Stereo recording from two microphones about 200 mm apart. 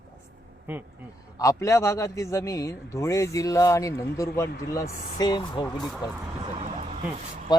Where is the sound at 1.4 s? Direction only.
15° left (ahead or behind).